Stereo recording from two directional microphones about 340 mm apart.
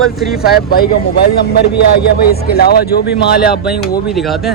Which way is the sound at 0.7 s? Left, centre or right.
Left.